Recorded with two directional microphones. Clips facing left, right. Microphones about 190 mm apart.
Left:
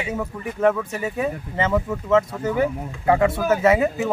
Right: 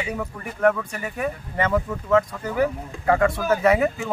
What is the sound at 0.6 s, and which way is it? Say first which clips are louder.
Speech: left 1 dB; 20° left (ahead or behind).